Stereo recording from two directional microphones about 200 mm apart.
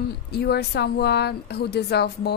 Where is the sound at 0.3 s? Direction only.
55° left (ahead or behind).